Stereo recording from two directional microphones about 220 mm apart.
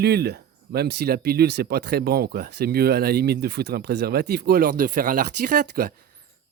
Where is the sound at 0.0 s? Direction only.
45° right (ahead or behind).